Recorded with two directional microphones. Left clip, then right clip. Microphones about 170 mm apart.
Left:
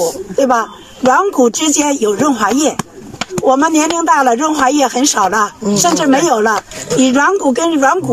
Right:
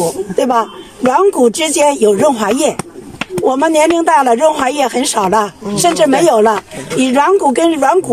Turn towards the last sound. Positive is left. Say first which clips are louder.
# right 1 dB
turn(degrees=-20)  # may be behind; listen again after turning